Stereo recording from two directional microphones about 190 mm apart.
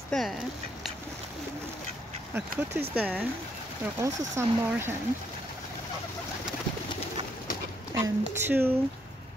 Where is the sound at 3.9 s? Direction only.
15° right (ahead or behind).